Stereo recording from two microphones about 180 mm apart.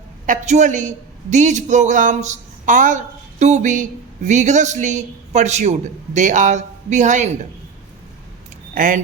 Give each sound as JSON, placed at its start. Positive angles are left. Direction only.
{"t": 0.3, "sound": "a man's voice", "side_deg": -40}
{"t": 8.7, "sound": "speech", "side_deg": -50}